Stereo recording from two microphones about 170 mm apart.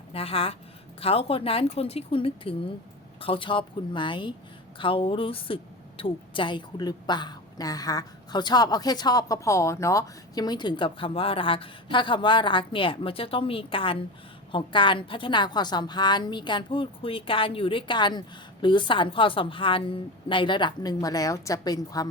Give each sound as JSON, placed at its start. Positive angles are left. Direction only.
{"t": 0.1, "sound": "a woman's voice", "side_deg": 35}